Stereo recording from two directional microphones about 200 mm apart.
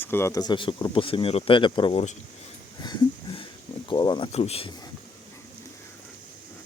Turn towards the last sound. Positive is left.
turn(degrees=30)  # may be behind; listen again after turning